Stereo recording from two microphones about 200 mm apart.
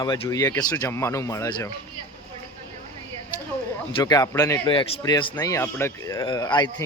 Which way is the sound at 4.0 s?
20° left (ahead or behind).